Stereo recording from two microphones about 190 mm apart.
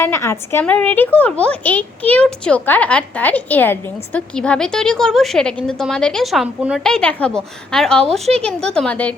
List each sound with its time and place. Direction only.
0.0 s a woman's voice: 15° left (ahead or behind)